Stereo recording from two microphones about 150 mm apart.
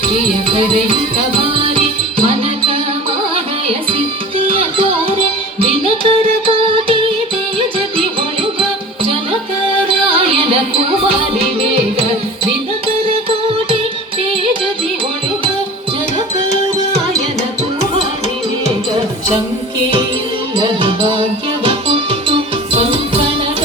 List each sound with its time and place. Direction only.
0.4 s music: 35° right (ahead or behind)
4.4 s music: 40° right (ahead or behind)
9.8 s music: 35° right (ahead or behind)
18.6 s music: 40° right (ahead or behind)
20.6 s music: 35° right (ahead or behind)